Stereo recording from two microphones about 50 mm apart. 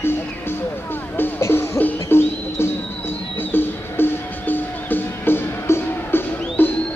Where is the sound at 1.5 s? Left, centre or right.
Left.